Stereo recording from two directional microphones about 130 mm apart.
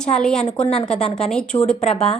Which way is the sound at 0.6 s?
50° left (ahead or behind).